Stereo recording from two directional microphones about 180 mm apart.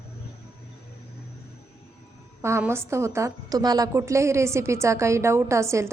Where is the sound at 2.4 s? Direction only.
15° right (ahead or behind).